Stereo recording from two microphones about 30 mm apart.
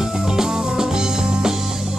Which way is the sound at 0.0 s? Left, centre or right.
Centre.